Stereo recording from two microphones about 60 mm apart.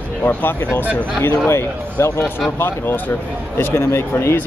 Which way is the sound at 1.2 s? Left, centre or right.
Left.